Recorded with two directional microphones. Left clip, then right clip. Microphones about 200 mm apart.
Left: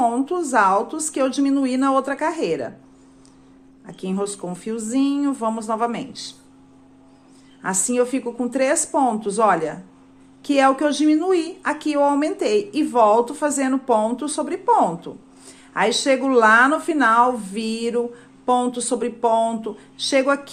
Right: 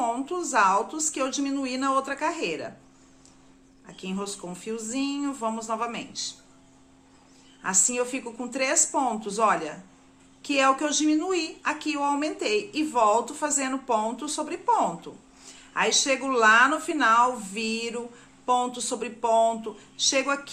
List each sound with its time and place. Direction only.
0.0 s a woman's voice: 25° left (ahead or behind)
3.8 s a woman's voice: 30° left (ahead or behind)
7.6 s a woman's voice: 30° left (ahead or behind)